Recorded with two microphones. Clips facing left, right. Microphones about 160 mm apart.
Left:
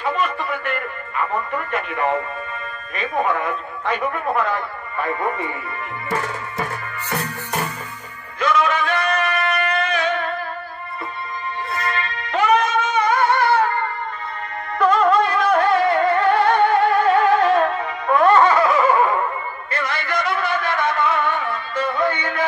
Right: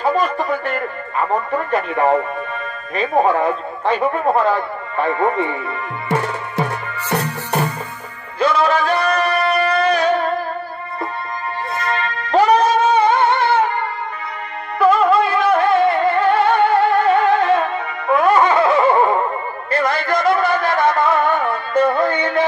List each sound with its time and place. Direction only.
0.0 s music: 35° right (ahead or behind)
3.0 s speech: 35° right (ahead or behind)
6.0 s music: 70° right (ahead or behind)
8.4 s a sound: 35° right (ahead or behind)
12.3 s music: 35° right (ahead or behind)
14.8 s music: 5° right (ahead or behind)
18.5 s a sound: 25° right (ahead or behind)
19.7 s a sound: 40° right (ahead or behind)
22.0 s music: 35° right (ahead or behind)